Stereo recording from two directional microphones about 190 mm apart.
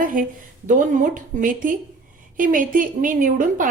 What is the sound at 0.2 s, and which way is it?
A woman's voice, 45° right (ahead or behind).